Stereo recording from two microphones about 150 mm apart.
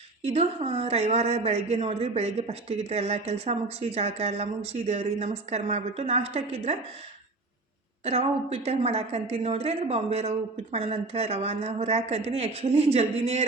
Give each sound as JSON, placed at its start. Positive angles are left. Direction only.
{"t": 0.2, "sound": "speech", "side_deg": -45}
{"t": 8.0, "sound": "speech", "side_deg": -40}